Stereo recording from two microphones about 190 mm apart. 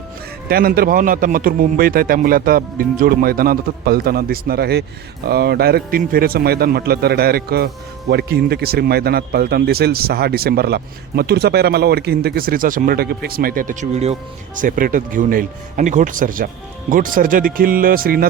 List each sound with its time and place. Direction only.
0.4 s speech: 50° right (ahead or behind)